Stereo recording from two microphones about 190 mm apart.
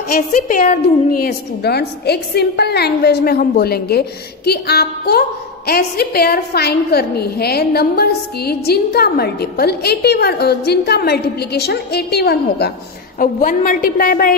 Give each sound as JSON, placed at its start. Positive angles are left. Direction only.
{"t": 0.1, "sound": "a woman's voice", "side_deg": 45}
{"t": 1.1, "sound": "a woman's voice", "side_deg": 55}
{"t": 13.2, "sound": "a woman's voice", "side_deg": 45}